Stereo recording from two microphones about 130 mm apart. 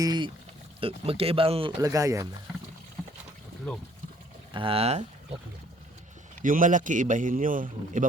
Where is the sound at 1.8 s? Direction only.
25° right (ahead or behind).